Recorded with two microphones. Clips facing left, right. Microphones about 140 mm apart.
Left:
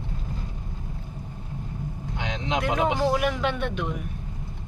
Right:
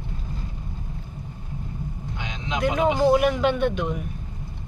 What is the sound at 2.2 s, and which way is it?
Vehicle, 85° left.